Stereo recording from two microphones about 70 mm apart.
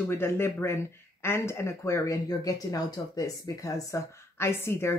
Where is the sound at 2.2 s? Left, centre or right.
Left.